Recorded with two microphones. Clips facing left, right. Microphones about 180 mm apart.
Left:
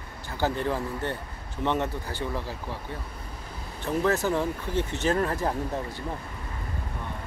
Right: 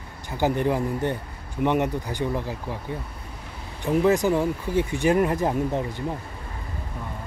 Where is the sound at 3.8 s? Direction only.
15° right (ahead or behind).